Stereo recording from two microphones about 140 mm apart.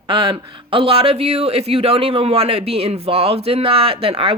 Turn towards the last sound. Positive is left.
turn(degrees=-40)  # may be behind; listen again after turning